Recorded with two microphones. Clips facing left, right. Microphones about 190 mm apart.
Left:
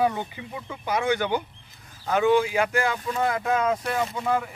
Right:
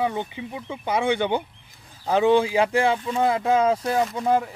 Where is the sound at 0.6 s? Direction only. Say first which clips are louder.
Right 2 dB; 25° right (ahead or behind).